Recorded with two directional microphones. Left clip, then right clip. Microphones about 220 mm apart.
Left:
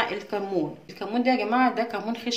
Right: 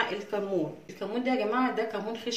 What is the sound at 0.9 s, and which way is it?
A woman's voice, 45° left (ahead or behind).